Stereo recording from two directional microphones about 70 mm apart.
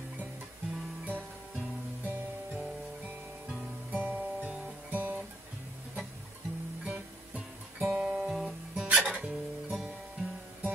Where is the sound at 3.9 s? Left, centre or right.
Right.